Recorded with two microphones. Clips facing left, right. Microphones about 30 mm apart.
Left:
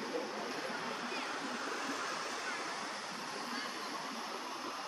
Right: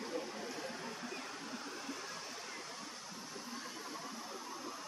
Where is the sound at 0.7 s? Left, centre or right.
Left.